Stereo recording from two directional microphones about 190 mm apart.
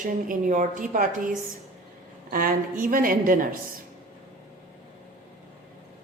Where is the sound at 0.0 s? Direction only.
45° right (ahead or behind).